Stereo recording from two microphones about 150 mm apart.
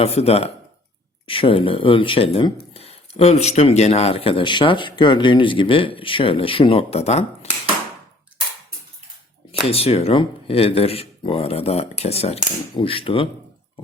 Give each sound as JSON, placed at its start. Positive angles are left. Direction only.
{"t": 0.0, "sound": "speech", "side_deg": 45}
{"t": 9.5, "sound": "speech", "side_deg": 40}